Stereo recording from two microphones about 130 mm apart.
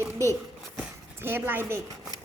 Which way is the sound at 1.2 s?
15° right (ahead or behind).